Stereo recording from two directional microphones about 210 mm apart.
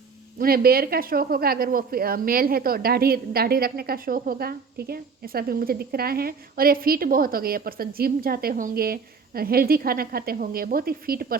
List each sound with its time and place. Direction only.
0.3 s speech: 45° right (ahead or behind)